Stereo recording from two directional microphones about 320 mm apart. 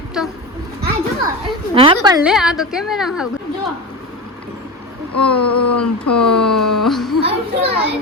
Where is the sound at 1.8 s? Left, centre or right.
Centre.